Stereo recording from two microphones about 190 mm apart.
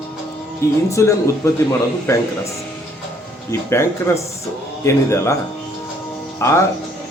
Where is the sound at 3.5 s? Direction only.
15° left (ahead or behind).